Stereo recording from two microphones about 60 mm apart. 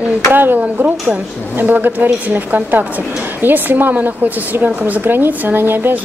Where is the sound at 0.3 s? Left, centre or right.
Right.